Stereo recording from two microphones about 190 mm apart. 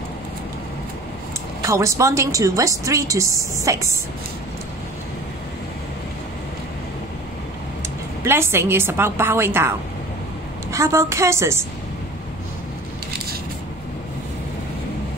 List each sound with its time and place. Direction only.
1.6 s a woman's voice: 15° right (ahead or behind)
8.2 s a woman's voice: 15° right (ahead or behind)